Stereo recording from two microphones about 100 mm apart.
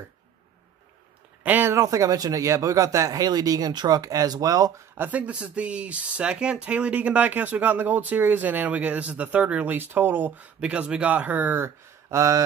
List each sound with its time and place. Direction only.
1.4 s speech: 20° right (ahead or behind)
1.8 s speech: 35° right (ahead or behind)
4.9 s speech: 15° right (ahead or behind)